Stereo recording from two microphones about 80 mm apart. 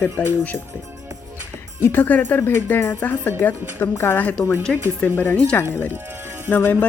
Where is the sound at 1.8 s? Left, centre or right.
Left.